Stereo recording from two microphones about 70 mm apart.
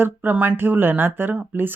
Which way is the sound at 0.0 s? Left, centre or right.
Right.